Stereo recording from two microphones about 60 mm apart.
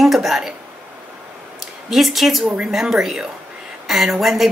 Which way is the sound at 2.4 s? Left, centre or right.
Right.